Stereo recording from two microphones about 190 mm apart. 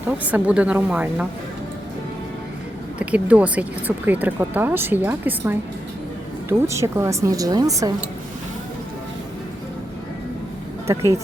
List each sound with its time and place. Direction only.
0.3 s speech: 10° right (ahead or behind)
3.0 s speech: 5° right (ahead or behind)
10.8 s speech: 15° right (ahead or behind)